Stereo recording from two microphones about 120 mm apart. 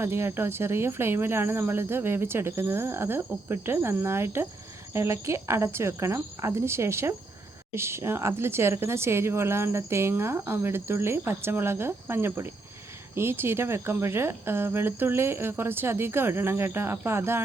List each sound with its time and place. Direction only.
0.0 s speech: 20° right (ahead or behind)